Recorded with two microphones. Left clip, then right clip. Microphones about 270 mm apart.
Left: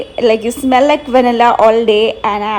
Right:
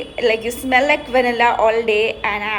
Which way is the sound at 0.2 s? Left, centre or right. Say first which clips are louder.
Left 6 dB; left.